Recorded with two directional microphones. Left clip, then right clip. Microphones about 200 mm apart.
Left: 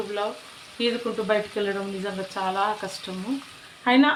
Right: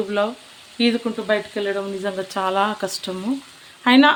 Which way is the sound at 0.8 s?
40° right (ahead or behind).